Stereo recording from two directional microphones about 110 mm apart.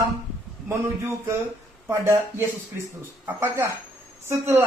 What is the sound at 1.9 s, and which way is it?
A woman's voice, 25° right (ahead or behind).